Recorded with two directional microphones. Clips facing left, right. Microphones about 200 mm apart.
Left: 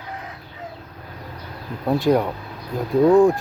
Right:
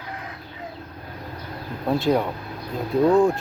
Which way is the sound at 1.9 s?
15° left (ahead or behind).